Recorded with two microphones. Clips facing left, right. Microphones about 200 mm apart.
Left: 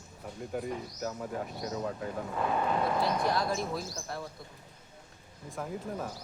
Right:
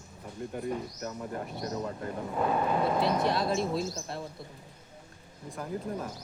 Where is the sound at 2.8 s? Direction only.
25° right (ahead or behind).